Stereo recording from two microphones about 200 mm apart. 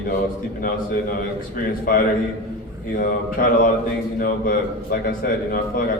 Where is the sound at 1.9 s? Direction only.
45° left (ahead or behind).